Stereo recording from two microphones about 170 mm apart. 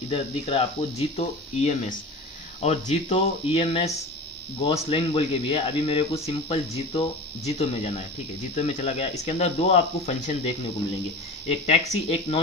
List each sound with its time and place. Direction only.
0.1 s speech: 35° left (ahead or behind)